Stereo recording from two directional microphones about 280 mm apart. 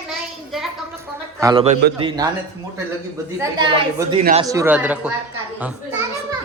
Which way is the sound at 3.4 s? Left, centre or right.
Centre.